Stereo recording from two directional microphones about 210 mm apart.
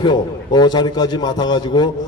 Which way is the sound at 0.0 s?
20° left (ahead or behind).